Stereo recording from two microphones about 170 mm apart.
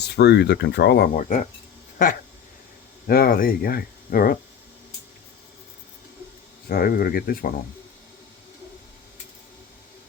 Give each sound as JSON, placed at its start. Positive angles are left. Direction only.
{"t": 0.0, "sound": "speech", "side_deg": 75}
{"t": 3.1, "sound": "speech", "side_deg": 60}
{"t": 6.7, "sound": "speech", "side_deg": 60}